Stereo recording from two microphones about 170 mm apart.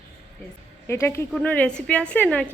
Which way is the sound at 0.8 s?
15° left (ahead or behind).